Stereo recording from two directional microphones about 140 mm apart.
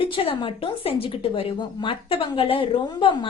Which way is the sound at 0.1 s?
35° left (ahead or behind).